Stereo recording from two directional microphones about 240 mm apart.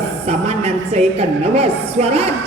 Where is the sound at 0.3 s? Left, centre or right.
Right.